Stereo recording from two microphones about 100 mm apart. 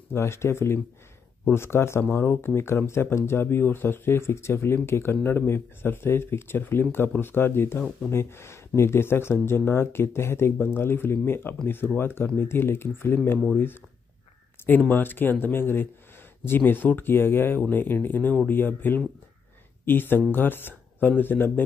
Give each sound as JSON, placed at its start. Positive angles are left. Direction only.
{"t": 0.1, "sound": "speech", "side_deg": 25}